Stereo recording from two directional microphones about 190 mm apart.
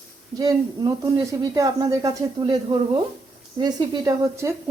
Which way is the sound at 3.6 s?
20° right (ahead or behind).